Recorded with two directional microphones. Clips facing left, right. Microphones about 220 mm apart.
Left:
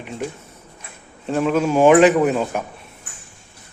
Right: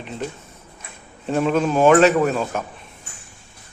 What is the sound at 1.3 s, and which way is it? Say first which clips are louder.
A man's voice: left 1 dB; centre (ahead or behind).